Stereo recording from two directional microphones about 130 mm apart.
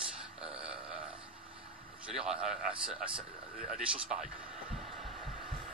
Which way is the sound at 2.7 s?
45° right (ahead or behind).